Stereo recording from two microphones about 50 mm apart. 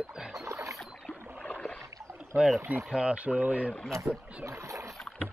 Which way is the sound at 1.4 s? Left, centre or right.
Left.